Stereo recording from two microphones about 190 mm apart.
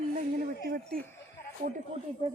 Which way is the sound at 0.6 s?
55° right (ahead or behind).